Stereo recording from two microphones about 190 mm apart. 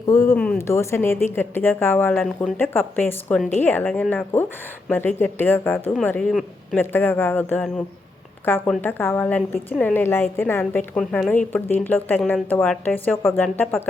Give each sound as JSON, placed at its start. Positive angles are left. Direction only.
{"t": 0.1, "sound": "speech", "side_deg": 15}
{"t": 0.3, "sound": "speech", "side_deg": 5}